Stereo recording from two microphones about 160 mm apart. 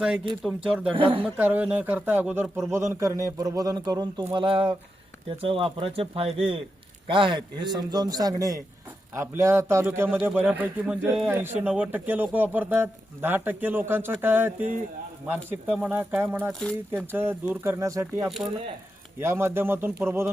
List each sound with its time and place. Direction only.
0.4 s speech: 5° right (ahead or behind)
0.9 s speech: 35° right (ahead or behind)
1.4 s a man's voice: 10° right (ahead or behind)
15.7 s speech: 10° right (ahead or behind)
16.5 s speech: 5° left (ahead or behind)
17.1 s speech: 15° right (ahead or behind)